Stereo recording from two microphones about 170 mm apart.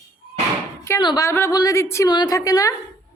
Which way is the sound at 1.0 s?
20° left (ahead or behind).